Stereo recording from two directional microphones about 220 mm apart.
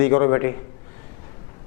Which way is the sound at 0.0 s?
15° left (ahead or behind).